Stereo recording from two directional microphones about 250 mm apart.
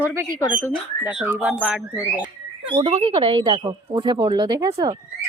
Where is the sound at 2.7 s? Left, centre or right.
Right.